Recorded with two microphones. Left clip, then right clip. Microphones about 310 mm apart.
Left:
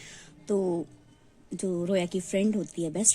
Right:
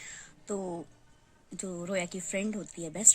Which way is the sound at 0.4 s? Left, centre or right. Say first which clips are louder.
Left 9 dB; centre.